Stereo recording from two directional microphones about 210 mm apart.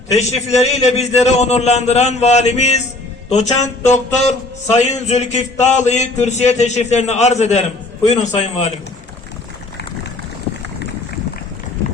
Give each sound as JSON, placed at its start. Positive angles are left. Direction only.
{"t": 0.1, "sound": "speech", "side_deg": 30}